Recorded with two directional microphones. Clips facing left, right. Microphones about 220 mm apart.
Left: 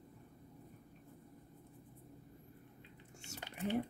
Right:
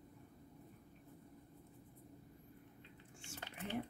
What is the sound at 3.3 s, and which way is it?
Squish, 40° left (ahead or behind).